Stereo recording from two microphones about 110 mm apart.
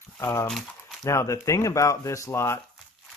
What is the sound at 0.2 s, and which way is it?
Speech, 25° left (ahead or behind).